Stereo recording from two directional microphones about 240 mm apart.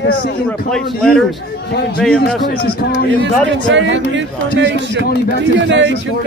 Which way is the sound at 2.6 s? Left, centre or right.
Left.